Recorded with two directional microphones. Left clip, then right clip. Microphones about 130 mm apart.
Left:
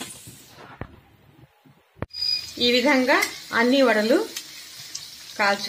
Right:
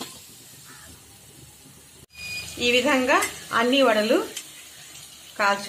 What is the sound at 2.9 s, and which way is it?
Speech, 45° left (ahead or behind).